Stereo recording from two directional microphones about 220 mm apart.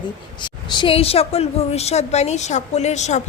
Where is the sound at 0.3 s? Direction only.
20° left (ahead or behind).